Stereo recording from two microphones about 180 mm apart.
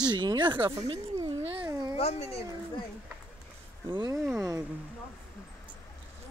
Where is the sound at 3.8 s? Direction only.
25° right (ahead or behind).